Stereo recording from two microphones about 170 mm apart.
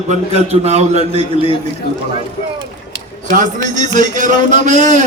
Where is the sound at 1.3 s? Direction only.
35° left (ahead or behind).